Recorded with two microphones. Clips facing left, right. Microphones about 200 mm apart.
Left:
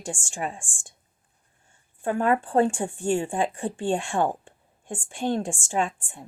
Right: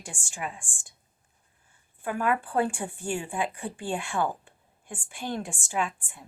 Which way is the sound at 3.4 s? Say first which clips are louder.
Left 5 dB; 45° left (ahead or behind).